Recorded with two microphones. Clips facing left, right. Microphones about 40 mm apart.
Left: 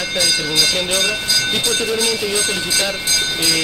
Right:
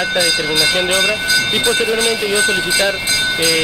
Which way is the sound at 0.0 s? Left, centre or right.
Centre.